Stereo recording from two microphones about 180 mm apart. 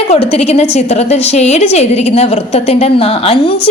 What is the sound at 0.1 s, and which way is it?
A woman's voice, 35° left (ahead or behind).